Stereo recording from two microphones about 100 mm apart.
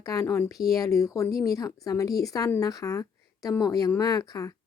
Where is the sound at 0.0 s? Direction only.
35° left (ahead or behind).